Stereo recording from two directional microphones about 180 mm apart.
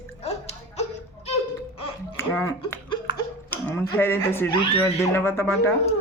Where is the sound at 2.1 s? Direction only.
15° left (ahead or behind).